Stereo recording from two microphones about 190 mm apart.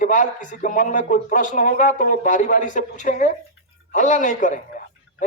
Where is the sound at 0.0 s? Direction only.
45° left (ahead or behind).